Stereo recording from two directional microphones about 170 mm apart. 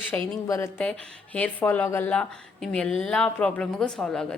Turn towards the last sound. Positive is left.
turn(degrees=5)  # may be behind; listen again after turning